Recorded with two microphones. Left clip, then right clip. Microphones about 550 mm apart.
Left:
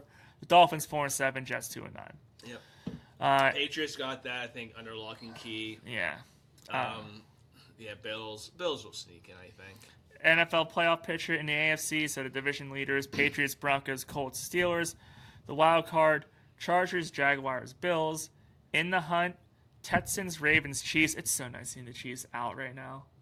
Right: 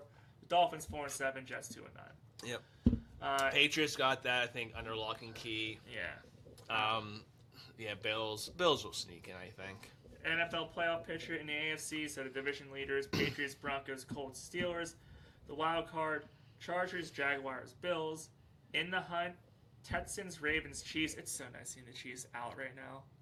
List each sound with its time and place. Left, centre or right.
0.4 s speech: left
3.2 s speech: left
3.5 s speech: right
5.8 s speech: left
7.8 s speech: right
10.2 s speech: left